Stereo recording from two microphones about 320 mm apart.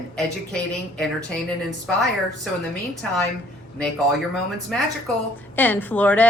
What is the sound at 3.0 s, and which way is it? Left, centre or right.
Speech, centre.